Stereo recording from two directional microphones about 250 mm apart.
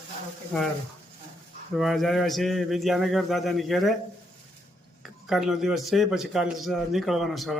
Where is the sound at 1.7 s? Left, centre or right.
Centre.